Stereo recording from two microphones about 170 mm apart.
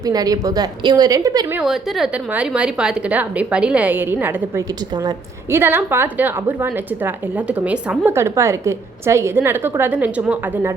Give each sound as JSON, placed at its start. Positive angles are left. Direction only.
{"t": 0.0, "sound": "a woman's voice", "side_deg": -20}
{"t": 1.5, "sound": "a woman's voice", "side_deg": 0}